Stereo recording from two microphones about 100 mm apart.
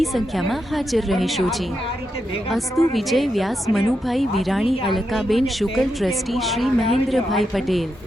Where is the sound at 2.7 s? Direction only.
Centre (ahead or behind).